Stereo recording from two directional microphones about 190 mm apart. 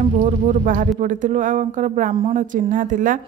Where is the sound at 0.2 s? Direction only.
45° right (ahead or behind).